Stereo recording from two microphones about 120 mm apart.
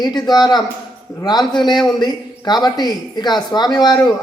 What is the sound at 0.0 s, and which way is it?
Speech, 35° left (ahead or behind).